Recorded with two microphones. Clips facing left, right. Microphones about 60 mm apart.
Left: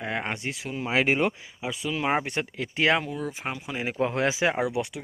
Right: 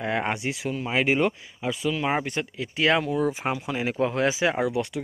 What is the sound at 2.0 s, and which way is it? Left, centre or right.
Speech, centre.